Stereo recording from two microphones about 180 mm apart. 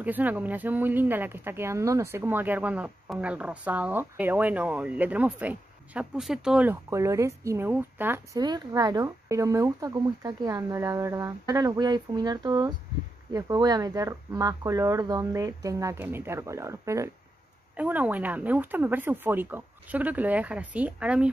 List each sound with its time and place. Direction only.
0.0 s speech: 10° right (ahead or behind)
8.4 s speech: 20° right (ahead or behind); by 21.3 s 5° right (ahead or behind)